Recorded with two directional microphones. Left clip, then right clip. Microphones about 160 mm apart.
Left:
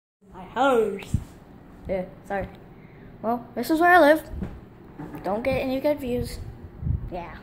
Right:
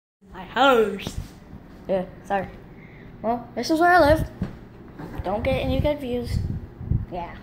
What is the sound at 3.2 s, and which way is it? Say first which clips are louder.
A woman's voice: right 1 dB; 25° left (ahead or behind).